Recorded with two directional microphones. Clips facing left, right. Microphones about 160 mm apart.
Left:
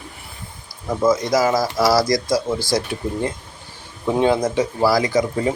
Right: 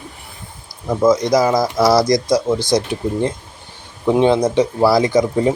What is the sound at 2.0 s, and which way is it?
Speech, 20° right (ahead or behind).